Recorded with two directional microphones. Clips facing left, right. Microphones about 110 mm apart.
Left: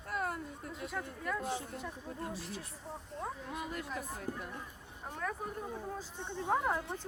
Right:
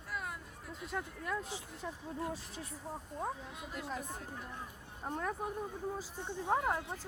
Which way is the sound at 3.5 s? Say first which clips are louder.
Left 5 dB; 55° left (ahead or behind).